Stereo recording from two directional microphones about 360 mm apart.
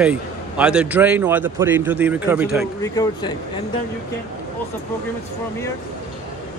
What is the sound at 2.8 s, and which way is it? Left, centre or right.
Speech, centre.